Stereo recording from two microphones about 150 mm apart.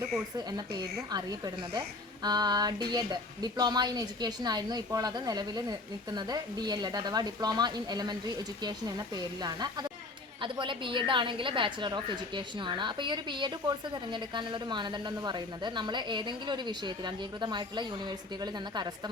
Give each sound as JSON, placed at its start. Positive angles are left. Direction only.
{"t": 1.1, "sound": "a woman's voice", "side_deg": -25}